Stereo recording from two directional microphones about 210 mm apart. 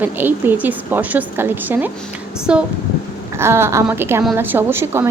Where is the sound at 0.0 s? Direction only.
10° right (ahead or behind).